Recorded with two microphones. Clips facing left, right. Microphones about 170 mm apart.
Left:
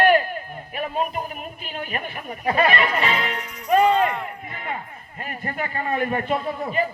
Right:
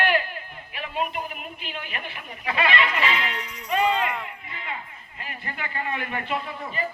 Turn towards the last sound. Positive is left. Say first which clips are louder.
# left 6 dB
turn(degrees=40)  # may be behind; listen again after turning